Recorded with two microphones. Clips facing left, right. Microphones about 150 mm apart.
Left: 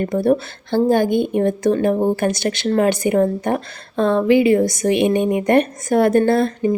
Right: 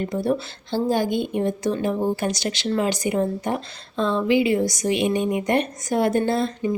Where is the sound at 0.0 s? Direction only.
55° left (ahead or behind).